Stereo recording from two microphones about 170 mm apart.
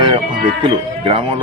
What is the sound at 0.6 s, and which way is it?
Speech, 30° right (ahead or behind).